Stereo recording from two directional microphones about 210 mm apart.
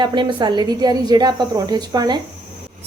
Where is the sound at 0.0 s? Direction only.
20° right (ahead or behind).